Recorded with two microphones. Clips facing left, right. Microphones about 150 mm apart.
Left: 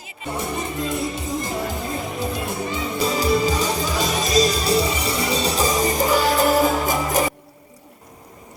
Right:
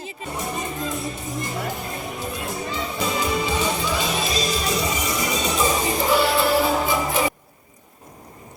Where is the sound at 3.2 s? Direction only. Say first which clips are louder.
Left 4 dB; 40° left (ahead or behind).